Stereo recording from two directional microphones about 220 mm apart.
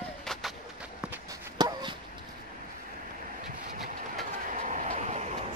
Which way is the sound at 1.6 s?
20° right (ahead or behind).